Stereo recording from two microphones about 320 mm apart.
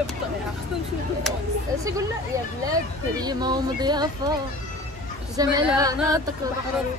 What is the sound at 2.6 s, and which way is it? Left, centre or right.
Speech, centre.